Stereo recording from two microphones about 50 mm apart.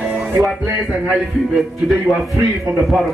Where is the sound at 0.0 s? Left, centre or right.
Right.